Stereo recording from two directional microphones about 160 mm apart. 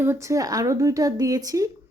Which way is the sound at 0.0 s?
15° right (ahead or behind).